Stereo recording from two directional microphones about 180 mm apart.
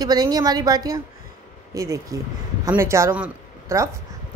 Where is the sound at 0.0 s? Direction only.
20° right (ahead or behind).